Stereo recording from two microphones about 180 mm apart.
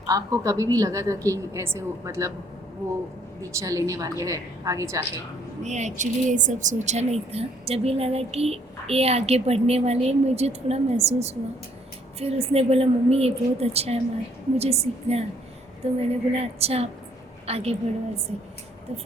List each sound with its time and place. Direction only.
0.1 s a woman's voice: 20° right (ahead or behind)
3.5 s a woman's voice: 15° right (ahead or behind)
5.6 s a woman's voice: 40° right (ahead or behind)